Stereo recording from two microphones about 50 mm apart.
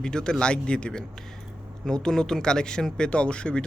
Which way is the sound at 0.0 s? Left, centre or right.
Centre.